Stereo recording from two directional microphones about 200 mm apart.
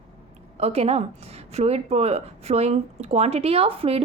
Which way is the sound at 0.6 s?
30° right (ahead or behind).